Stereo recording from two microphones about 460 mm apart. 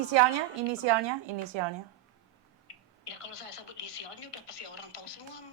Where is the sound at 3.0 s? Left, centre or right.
Left.